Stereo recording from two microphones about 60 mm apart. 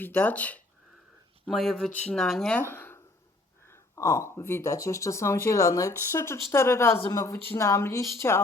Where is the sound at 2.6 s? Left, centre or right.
Left.